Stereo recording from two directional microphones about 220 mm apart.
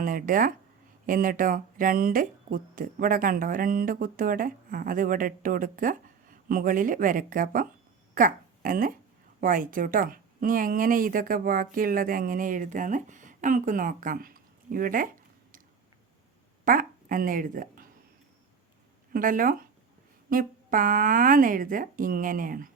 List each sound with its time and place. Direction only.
0.0 s speech: 40° right (ahead or behind)
16.6 s speech: 40° right (ahead or behind)
19.1 s speech: 40° right (ahead or behind)